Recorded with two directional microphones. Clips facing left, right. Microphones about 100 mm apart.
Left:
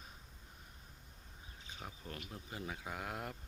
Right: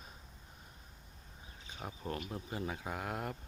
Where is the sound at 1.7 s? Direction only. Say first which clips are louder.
Right 8 dB; 45° right (ahead or behind).